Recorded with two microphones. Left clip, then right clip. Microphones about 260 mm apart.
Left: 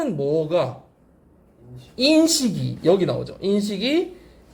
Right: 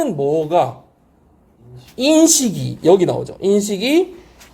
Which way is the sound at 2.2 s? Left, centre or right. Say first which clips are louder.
Right 6 dB; centre.